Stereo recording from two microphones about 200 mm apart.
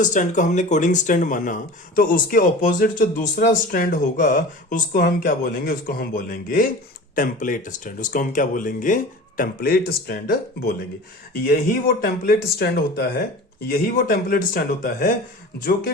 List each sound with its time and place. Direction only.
0.0 s speech: 40° left (ahead or behind)